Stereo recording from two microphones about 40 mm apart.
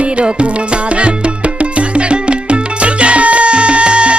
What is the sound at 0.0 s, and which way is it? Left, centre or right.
Music, right.